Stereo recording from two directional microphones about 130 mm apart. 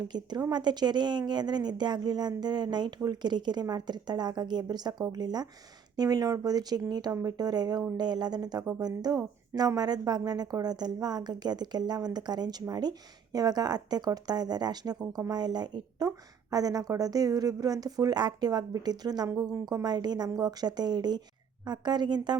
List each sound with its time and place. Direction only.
0.1 s a woman's voice: 30° right (ahead or behind)